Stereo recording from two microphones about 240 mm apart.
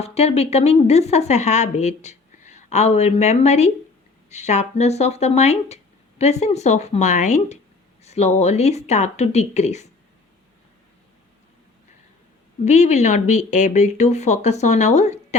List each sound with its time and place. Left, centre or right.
0.0 s speech: left
12.6 s speech: left